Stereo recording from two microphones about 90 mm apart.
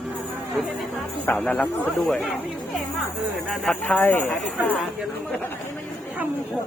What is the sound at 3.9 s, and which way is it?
Speech, 20° left (ahead or behind).